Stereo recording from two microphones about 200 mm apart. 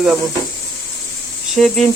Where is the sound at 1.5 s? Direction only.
Centre (ahead or behind).